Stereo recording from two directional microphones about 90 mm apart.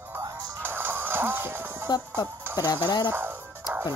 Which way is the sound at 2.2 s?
45° left (ahead or behind).